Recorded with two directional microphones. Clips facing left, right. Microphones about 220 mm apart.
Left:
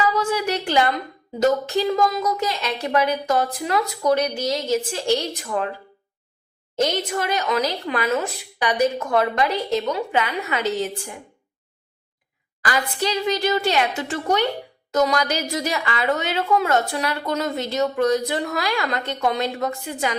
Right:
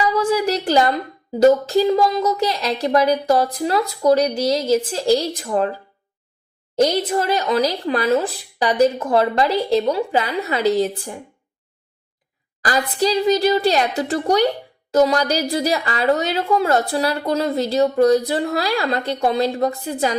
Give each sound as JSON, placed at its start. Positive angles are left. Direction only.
{"t": 0.4, "sound": "a woman's voice", "side_deg": -35}
{"t": 12.9, "sound": "a woman's voice", "side_deg": -35}